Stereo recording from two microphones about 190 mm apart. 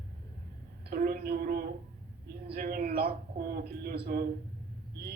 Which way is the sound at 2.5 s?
50° right (ahead or behind).